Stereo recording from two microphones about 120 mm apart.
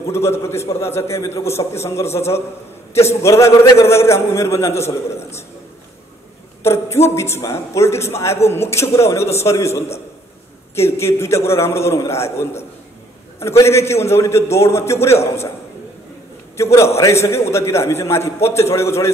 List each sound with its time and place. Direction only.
0.1 s a man's voice: 20° left (ahead or behind)
6.6 s a man's voice: 20° left (ahead or behind)
16.7 s a man's voice: 25° left (ahead or behind)